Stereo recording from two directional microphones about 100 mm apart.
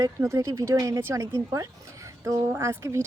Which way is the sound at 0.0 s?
30° right (ahead or behind).